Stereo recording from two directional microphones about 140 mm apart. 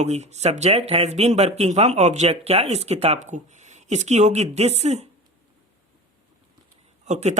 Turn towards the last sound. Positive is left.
turn(degrees=-55)  # may be behind; listen again after turning